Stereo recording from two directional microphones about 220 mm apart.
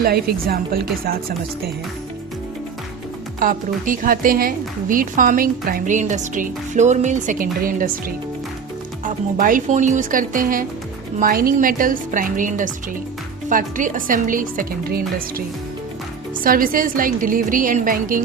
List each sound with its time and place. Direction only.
0.0 s a woman's voice: 45° right (ahead or behind)
3.4 s a woman's voice: 40° right (ahead or behind)
9.4 s a woman's voice: 35° right (ahead or behind)